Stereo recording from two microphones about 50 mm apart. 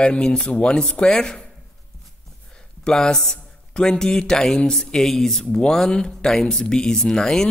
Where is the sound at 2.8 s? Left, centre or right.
Centre.